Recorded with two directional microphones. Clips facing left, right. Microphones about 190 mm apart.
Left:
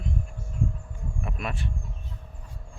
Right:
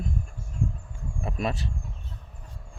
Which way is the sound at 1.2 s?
30° right (ahead or behind).